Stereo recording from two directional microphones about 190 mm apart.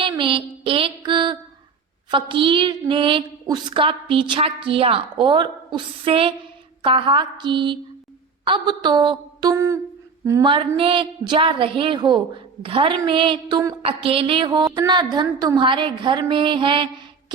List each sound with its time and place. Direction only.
0.0 s mantra: 25° right (ahead or behind)
2.0 s a woman's voice: 25° right (ahead or behind)
10.2 s a sound: 15° right (ahead or behind)
10.8 s a woman's voice: 30° right (ahead or behind)